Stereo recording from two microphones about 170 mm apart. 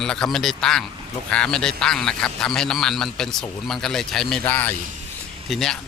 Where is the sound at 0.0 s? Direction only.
5° left (ahead or behind).